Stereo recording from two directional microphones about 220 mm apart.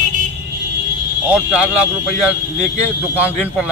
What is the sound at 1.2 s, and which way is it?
Speech, 5° right (ahead or behind).